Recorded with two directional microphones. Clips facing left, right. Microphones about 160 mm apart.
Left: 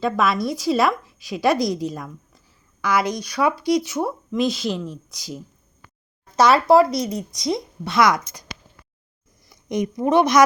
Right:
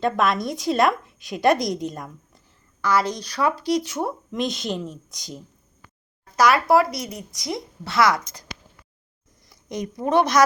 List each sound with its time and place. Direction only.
0.0 s a woman's voice: centre (ahead or behind)
2.8 s a woman's voice: 10° left (ahead or behind)
6.3 s speech: 25° left (ahead or behind)
9.6 s speech: 15° left (ahead or behind)